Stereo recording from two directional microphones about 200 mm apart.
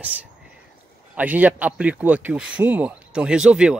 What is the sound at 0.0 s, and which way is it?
A man's voice, 5° right (ahead or behind).